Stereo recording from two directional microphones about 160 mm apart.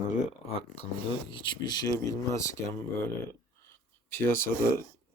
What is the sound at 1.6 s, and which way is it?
Speech, 25° left (ahead or behind).